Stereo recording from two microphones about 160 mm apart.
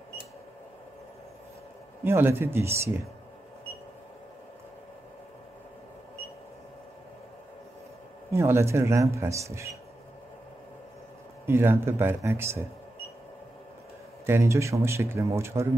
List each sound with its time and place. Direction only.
2.0 s speech: 15° right (ahead or behind)
8.3 s speech: 15° right (ahead or behind)
11.4 s speech: 15° right (ahead or behind)
14.2 s speech: 15° right (ahead or behind)